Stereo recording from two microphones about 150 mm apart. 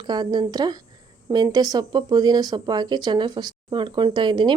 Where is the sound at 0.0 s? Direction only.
30° right (ahead or behind).